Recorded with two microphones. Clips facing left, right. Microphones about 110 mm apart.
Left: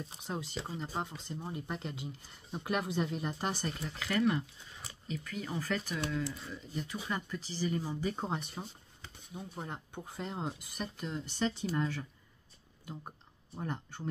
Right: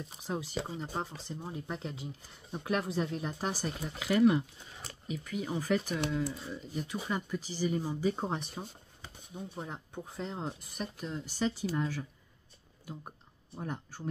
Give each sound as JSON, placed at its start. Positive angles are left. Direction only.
{"t": 0.2, "sound": "speech", "side_deg": -5}
{"t": 3.8, "sound": "speech", "side_deg": -15}
{"t": 13.6, "sound": "speech", "side_deg": -5}